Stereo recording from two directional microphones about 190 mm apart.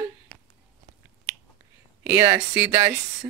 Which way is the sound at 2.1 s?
10° right (ahead or behind).